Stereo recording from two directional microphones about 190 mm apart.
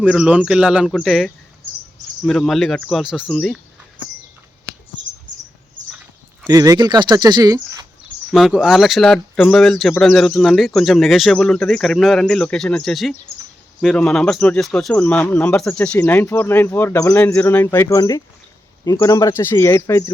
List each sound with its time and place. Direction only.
0.0 s speech: 5° right (ahead or behind)
6.5 s speech: 20° right (ahead or behind)
8.0 s speech: centre (ahead or behind); by 20.1 s 15° left (ahead or behind)